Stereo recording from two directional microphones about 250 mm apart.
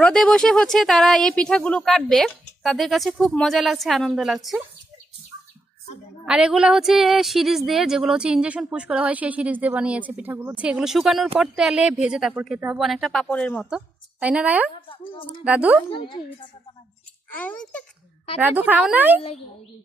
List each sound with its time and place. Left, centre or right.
0.0 s a woman's voice: centre
6.2 s a woman's voice: centre
15.9 s a woman's voice: centre
17.3 s a woman's voice: centre
18.4 s a woman's voice: centre